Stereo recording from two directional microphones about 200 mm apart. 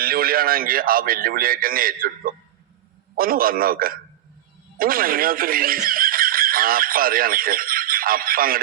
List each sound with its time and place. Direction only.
0.0 s a man's voice: 50° right (ahead or behind)